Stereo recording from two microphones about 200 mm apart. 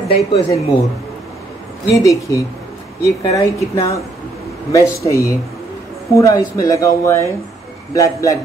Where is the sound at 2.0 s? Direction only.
15° left (ahead or behind).